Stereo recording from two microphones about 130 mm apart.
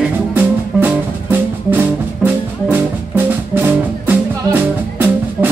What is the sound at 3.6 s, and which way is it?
Music, 15° right (ahead or behind).